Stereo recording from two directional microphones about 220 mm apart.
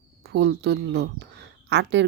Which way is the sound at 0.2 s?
50° right (ahead or behind).